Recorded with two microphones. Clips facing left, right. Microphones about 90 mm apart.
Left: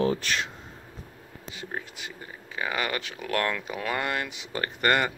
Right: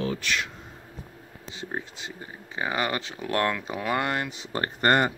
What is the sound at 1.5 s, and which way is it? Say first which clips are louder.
Speech: right 2 dB; 25° right (ahead or behind).